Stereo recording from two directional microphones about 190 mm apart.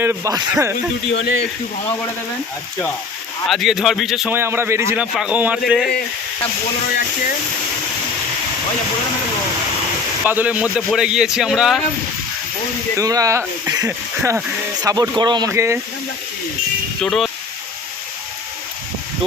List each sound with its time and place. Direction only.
0.0 s speech: 15° right (ahead or behind)
1.1 s speech: 60° left (ahead or behind)
3.4 s a man's voice: centre (ahead or behind)
4.4 s a man's voice: 10° right (ahead or behind)
10.2 s a man's voice: 10° right (ahead or behind)
13.0 s speech: 20° right (ahead or behind)
17.0 s speech: centre (ahead or behind)